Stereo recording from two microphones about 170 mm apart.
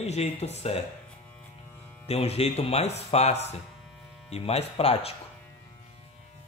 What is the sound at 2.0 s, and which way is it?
Speech, 35° left (ahead or behind).